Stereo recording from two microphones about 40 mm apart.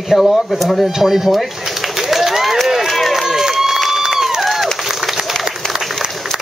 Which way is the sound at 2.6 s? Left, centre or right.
Centre.